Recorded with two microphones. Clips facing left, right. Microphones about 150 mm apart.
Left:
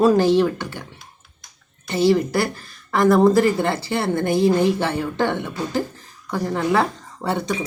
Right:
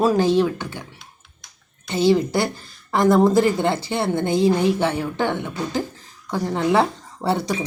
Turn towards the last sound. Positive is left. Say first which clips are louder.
# right 1 dB
turn(degrees=-10)  # may be behind; listen again after turning